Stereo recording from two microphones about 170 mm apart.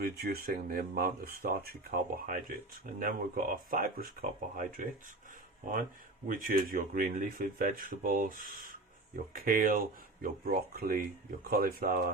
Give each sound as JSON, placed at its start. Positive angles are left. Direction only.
{"t": 0.0, "sound": "speech", "side_deg": -65}
{"t": 6.2, "sound": "speech", "side_deg": -55}